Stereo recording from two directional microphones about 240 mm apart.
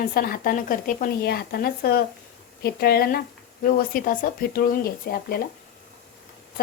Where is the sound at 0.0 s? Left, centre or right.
Left.